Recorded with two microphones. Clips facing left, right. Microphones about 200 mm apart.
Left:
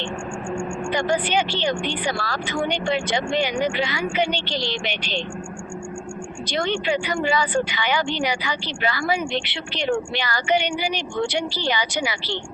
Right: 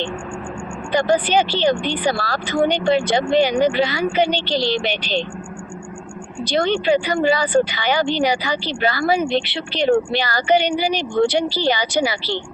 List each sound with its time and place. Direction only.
0.9 s speech: 35° right (ahead or behind)
6.5 s speech: 35° right (ahead or behind)